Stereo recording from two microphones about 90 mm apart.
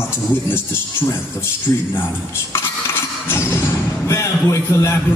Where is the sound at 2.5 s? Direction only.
25° left (ahead or behind).